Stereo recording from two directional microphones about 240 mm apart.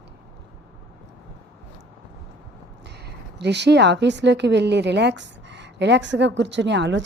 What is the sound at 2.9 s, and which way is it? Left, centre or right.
Speech, right.